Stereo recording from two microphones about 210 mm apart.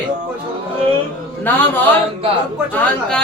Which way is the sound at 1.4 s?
10° left (ahead or behind).